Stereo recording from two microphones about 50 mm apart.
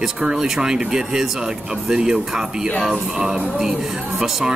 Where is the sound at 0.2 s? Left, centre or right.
Centre.